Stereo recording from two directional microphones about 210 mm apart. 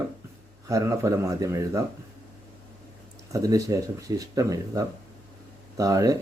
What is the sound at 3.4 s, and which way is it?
Speech, 15° right (ahead or behind).